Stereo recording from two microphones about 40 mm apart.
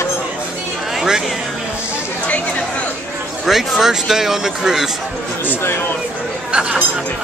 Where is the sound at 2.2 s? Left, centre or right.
Left.